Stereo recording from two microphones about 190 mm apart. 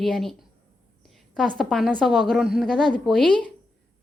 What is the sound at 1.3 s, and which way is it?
Speech, centre (ahead or behind).